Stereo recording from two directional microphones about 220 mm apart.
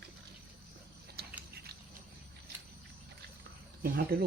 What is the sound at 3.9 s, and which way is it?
Speech, 45° right (ahead or behind).